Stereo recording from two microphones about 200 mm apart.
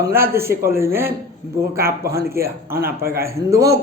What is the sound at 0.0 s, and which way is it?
Speech, 10° right (ahead or behind).